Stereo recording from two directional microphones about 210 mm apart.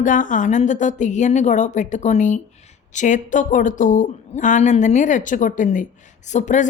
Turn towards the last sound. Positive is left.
turn(degrees=35)  # may be behind; listen again after turning